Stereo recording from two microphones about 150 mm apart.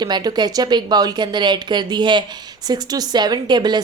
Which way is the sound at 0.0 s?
30° right (ahead or behind).